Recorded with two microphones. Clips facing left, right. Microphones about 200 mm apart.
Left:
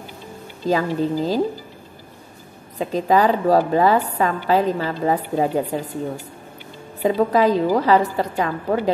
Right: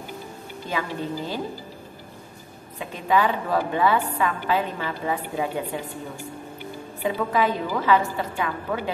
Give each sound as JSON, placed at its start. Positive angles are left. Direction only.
{"t": 0.7, "sound": "a woman's voice", "side_deg": 40}
{"t": 2.8, "sound": "a woman's voice", "side_deg": 40}
{"t": 7.0, "sound": "a woman's voice", "side_deg": 40}